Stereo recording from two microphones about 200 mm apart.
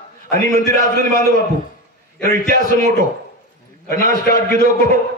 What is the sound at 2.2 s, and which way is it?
A man's voice, 40° right (ahead or behind).